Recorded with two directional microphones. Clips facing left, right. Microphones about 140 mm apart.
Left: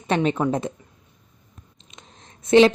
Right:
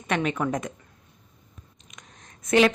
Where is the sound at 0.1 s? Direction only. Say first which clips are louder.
Left 4 dB; 30° left (ahead or behind).